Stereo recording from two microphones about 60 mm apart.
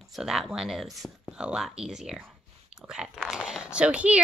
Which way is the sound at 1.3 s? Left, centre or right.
Centre.